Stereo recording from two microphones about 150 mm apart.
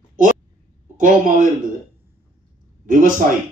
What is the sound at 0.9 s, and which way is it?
Speech, 60° right (ahead or behind).